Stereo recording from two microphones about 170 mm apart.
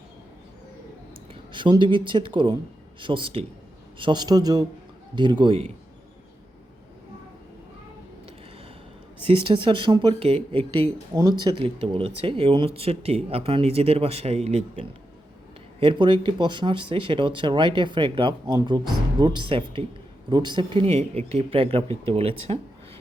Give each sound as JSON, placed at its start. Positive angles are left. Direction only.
{"t": 1.3, "sound": "speech", "side_deg": -30}
{"t": 9.2, "sound": "speech", "side_deg": -30}